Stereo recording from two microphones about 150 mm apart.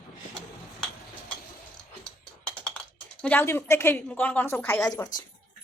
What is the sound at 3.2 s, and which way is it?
Speech, 10° left (ahead or behind).